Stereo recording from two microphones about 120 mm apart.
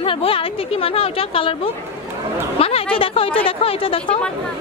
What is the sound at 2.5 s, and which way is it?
Speech, 55° left (ahead or behind).